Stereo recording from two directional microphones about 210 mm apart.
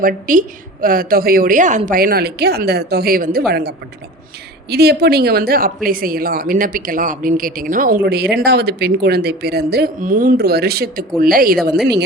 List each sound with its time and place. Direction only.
0.0 s a woman's voice: 40° right (ahead or behind)